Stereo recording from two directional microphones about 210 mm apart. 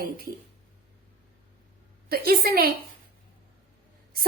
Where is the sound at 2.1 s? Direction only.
45° right (ahead or behind).